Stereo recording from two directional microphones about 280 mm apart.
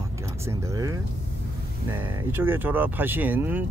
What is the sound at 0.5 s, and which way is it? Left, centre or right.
Speech, centre.